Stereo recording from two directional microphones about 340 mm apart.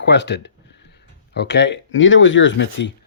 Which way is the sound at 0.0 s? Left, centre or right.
Left.